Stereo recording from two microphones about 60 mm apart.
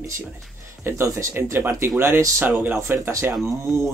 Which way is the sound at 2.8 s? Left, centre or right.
Right.